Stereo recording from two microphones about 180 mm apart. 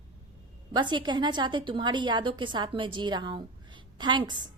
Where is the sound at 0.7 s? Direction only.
25° right (ahead or behind).